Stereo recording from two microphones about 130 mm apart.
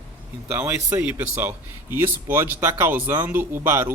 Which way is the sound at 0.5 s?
15° right (ahead or behind).